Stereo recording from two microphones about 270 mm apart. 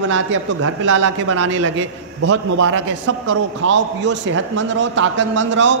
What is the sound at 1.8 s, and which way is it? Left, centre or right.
A man's voice, right.